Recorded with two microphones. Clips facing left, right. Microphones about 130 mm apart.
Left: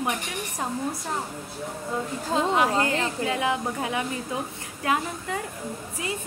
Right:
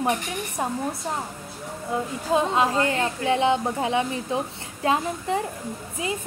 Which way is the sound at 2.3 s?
25° right (ahead or behind).